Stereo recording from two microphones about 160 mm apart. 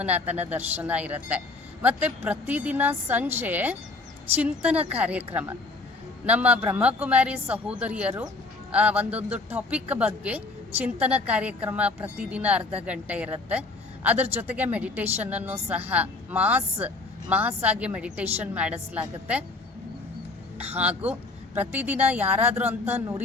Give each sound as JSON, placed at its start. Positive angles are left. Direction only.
{"t": 0.0, "sound": "speech", "side_deg": -10}
{"t": 20.6, "sound": "a sound", "side_deg": -40}
{"t": 20.8, "sound": "speech", "side_deg": -10}